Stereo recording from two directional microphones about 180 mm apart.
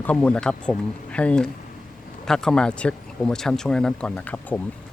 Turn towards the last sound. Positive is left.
turn(degrees=10)  # may be behind; listen again after turning